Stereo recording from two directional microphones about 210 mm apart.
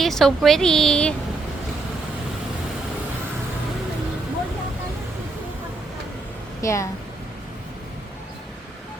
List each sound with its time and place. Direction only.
0.0 s a woman's voice: centre (ahead or behind)
6.6 s a woman's voice: 15° left (ahead or behind)